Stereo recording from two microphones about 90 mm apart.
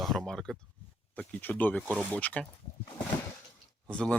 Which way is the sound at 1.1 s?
15° left (ahead or behind).